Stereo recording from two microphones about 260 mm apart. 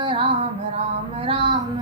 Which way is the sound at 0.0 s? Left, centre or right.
Centre.